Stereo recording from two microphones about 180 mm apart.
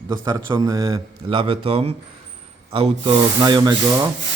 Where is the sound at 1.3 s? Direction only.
30° right (ahead or behind).